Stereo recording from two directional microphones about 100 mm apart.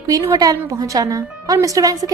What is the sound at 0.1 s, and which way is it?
A woman's voice, 40° right (ahead or behind).